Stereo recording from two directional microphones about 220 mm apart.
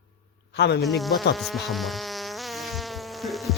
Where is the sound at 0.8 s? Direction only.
Centre (ahead or behind).